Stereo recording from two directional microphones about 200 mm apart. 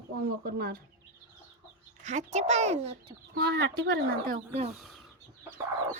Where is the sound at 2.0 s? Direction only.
35° right (ahead or behind).